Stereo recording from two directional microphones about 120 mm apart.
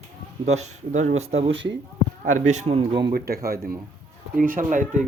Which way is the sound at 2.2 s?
90° right.